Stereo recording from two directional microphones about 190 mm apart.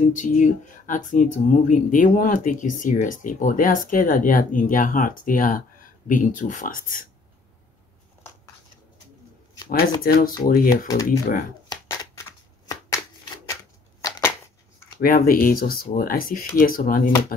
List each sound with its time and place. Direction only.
0.0 s speech: 40° left (ahead or behind)
9.7 s speech: 50° left (ahead or behind)
11.7 s a sound: 20° left (ahead or behind)
14.0 s shuffling cards: 20° left (ahead or behind)
15.0 s speech: 50° left (ahead or behind)